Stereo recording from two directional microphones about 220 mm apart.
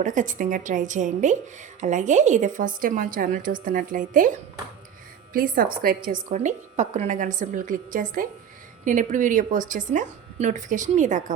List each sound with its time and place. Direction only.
0.0 s a woman's voice: 35° right (ahead or behind)